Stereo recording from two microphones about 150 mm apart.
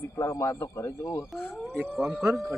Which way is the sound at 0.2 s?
20° left (ahead or behind).